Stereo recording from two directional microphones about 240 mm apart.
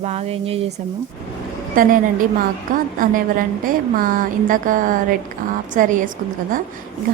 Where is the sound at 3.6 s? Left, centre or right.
Right.